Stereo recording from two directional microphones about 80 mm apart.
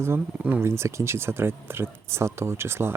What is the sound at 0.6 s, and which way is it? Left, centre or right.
Speech, right.